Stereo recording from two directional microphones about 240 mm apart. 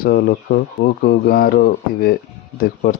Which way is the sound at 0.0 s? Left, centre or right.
Left.